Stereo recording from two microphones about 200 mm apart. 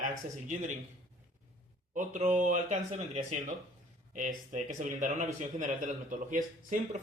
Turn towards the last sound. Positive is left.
turn(degrees=-40)  # may be behind; listen again after turning